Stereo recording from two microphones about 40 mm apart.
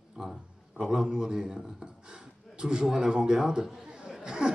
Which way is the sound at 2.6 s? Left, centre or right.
Right.